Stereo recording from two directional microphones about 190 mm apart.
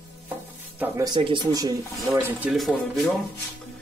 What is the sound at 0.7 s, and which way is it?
Speech, 20° right (ahead or behind).